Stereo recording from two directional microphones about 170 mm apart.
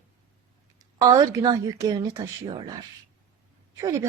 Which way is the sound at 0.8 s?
20° right (ahead or behind).